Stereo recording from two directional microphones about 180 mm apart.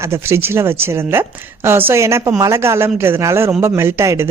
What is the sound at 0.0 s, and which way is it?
Speech, 15° right (ahead or behind).